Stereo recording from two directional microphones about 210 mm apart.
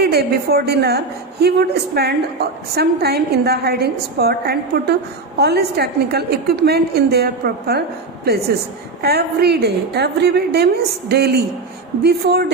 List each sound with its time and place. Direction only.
0.0 s a woman's voice: 50° right (ahead or behind)
9.0 s a woman's voice: 50° right (ahead or behind)